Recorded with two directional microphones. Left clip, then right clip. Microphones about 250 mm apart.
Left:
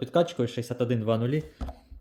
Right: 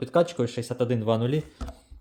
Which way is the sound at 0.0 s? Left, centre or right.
Centre.